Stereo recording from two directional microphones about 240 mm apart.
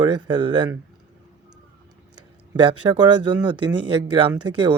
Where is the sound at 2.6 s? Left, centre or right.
Centre.